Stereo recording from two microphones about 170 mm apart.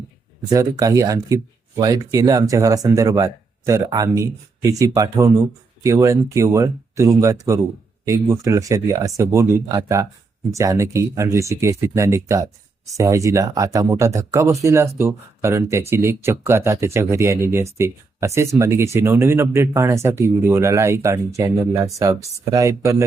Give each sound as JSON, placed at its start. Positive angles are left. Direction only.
{"t": 0.5, "sound": "speech", "side_deg": -20}